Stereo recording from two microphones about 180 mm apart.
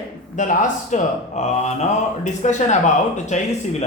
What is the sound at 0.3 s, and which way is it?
A man's voice, 45° left (ahead or behind).